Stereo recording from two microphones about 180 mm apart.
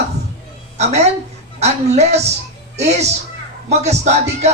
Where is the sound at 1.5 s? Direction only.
40° right (ahead or behind).